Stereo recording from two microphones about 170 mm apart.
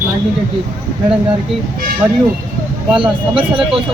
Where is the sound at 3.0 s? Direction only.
30° right (ahead or behind).